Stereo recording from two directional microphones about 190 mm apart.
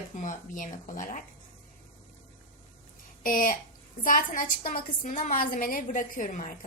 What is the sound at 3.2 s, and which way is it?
A woman's voice, 45° left (ahead or behind).